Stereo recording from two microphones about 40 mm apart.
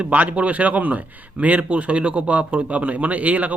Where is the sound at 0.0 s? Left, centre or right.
Right.